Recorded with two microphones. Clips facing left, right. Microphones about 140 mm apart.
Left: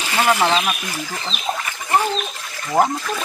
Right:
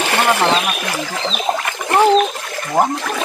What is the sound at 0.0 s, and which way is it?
Speech, 65° right (ahead or behind).